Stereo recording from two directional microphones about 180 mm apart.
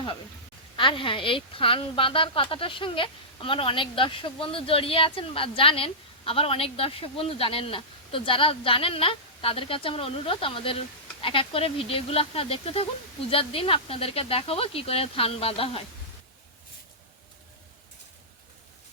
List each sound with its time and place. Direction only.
0.8 s a woman's voice: 30° left (ahead or behind)